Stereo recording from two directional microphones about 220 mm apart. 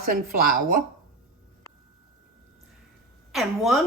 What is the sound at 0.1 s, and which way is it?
Speech, 40° right (ahead or behind).